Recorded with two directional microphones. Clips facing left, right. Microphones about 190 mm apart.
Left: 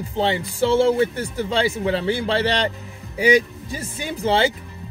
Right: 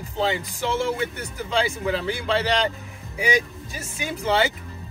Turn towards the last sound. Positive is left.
turn(degrees=30)  # may be behind; listen again after turning